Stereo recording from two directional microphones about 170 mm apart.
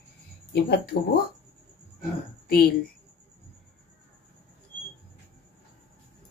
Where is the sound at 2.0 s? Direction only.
65° left (ahead or behind).